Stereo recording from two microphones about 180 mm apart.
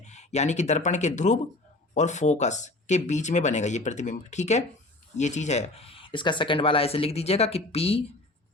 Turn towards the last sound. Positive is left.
turn(degrees=35)  # may be behind; listen again after turning